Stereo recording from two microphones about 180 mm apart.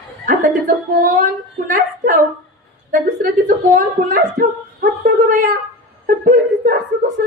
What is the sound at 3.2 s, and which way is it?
Speech, 50° right (ahead or behind).